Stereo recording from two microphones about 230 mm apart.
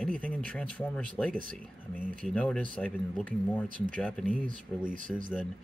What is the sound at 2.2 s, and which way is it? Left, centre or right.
Speech, centre.